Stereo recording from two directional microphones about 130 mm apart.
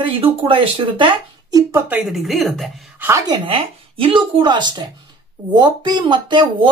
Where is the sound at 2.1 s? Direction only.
Centre (ahead or behind).